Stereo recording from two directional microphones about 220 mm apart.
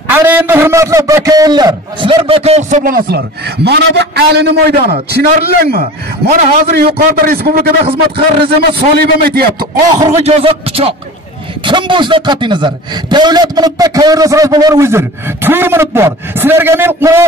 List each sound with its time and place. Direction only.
0.1 s a man's voice: 10° right (ahead or behind); by 7.6 s 40° right (ahead or behind)
7.8 s a man's voice: 25° right (ahead or behind)
8.5 s a man's voice: 45° right (ahead or behind)
9.8 s a man's voice: 15° right (ahead or behind)
10.1 s a man's voice: 30° right (ahead or behind); by 17.2 s 10° right (ahead or behind)